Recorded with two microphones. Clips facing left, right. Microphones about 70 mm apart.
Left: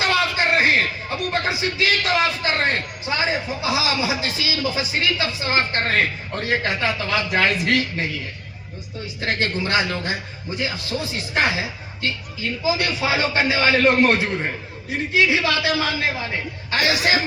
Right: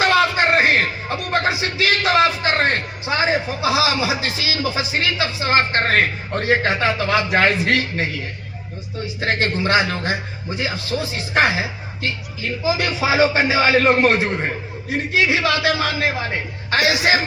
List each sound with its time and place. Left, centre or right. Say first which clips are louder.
0.3 s a sound: right 2 dB; right
1.4 s a man's voice: right 3 dB; right
9.2 s a man's voice: right 3 dB; right
13.0 s a man's voice: right 4 dB; centre